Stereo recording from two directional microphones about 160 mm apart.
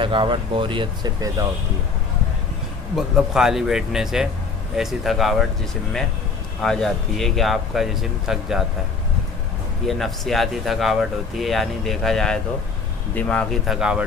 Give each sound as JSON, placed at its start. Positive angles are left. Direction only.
{"t": 0.0, "sound": "speech", "side_deg": -30}
{"t": 3.0, "sound": "speech", "side_deg": 0}
{"t": 6.6, "sound": "speech", "side_deg": 5}
{"t": 9.8, "sound": "speech", "side_deg": 0}